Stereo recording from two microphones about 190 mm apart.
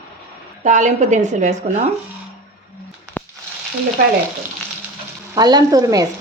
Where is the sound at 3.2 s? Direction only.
10° left (ahead or behind).